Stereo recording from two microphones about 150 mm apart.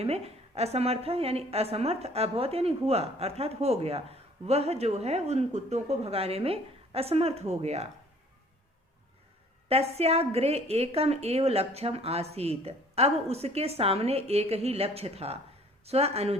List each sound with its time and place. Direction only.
0.0 s a woman's voice: 45° right (ahead or behind)
9.6 s a woman's voice: 45° right (ahead or behind)